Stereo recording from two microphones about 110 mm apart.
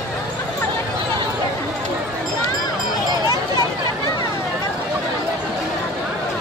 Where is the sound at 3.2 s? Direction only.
40° left (ahead or behind).